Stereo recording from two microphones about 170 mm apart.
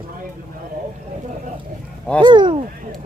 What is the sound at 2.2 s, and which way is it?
Speech, 30° right (ahead or behind).